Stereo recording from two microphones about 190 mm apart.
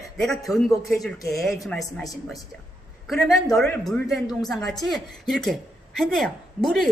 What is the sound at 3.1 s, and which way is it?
A woman's voice, centre (ahead or behind).